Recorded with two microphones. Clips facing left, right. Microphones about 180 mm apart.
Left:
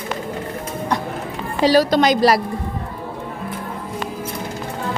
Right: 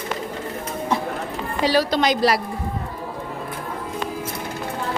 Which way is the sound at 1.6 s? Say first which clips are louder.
Left 5 dB; 40° left (ahead or behind).